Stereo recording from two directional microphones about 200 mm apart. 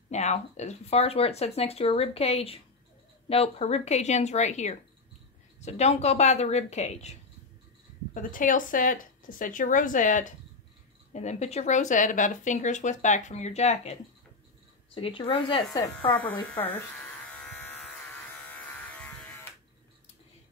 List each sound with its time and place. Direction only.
0.1 s speech: 35° left (ahead or behind)
15.0 s speech: 25° left (ahead or behind); by 16.8 s 10° left (ahead or behind)
17.4 s electric shaver: 10° left (ahead or behind)